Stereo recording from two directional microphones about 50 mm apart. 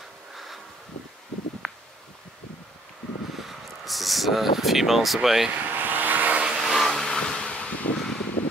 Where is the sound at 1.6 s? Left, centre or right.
Right.